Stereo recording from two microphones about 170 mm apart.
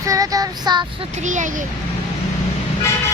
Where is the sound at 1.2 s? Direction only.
45° right (ahead or behind).